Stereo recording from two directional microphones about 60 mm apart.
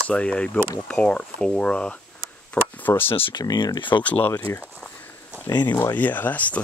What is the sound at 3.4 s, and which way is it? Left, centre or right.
Speech, left.